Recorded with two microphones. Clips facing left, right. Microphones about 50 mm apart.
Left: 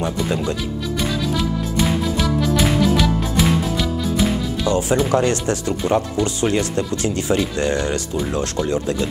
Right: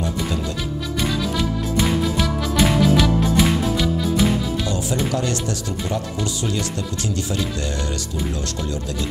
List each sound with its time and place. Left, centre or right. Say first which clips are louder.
1.8 s music: even; centre
4.6 s speech: left 6 dB; left